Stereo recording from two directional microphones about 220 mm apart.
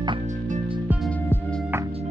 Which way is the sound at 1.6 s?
10° right (ahead or behind).